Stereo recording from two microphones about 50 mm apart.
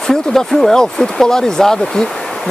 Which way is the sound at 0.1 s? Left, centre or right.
Centre.